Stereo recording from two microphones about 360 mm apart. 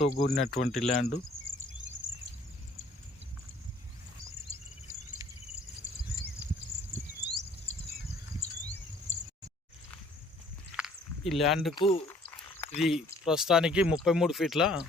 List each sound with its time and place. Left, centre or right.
0.0 s speech: centre
10.8 s a sound: centre
11.7 s speech: centre